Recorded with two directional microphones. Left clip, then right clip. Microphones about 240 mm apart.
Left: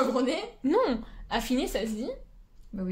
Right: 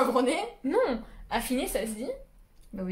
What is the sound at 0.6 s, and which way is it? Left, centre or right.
Speech, left.